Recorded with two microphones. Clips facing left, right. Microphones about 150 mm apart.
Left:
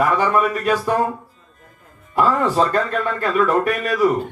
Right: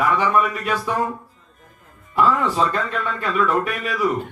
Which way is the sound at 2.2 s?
40° left (ahead or behind).